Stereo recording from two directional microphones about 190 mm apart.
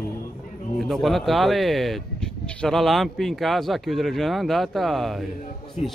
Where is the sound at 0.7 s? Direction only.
Centre (ahead or behind).